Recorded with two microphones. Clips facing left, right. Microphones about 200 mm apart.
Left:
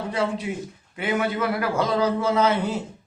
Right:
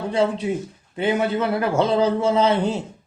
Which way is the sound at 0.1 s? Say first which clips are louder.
Right 6 dB; 30° right (ahead or behind).